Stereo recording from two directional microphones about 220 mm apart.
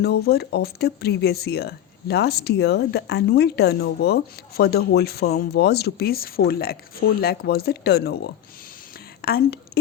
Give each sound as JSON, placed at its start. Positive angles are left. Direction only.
{"t": 0.0, "sound": "speech", "side_deg": 45}